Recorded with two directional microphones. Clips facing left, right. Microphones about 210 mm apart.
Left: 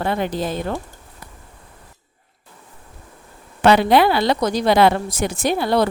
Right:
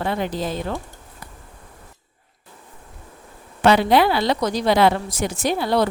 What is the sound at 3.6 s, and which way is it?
A woman's voice, 60° left (ahead or behind).